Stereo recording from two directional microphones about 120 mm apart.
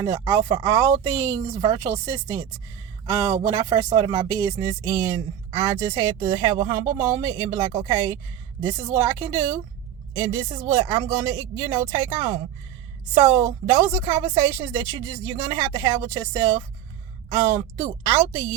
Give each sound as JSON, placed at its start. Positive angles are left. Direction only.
{"t": 0.0, "sound": "a woman's voice", "side_deg": -25}